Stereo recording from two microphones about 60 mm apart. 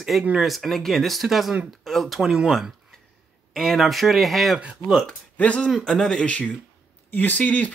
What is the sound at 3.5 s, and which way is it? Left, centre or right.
Speech, centre.